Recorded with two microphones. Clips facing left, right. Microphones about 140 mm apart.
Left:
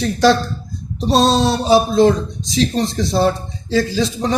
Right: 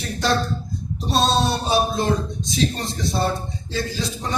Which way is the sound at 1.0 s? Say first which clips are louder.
Left 6 dB; 90° left.